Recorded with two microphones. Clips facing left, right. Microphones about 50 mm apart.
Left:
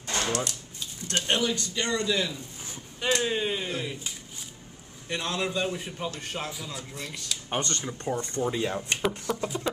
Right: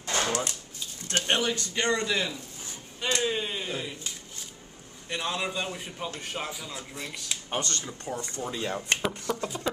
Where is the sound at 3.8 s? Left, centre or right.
Centre.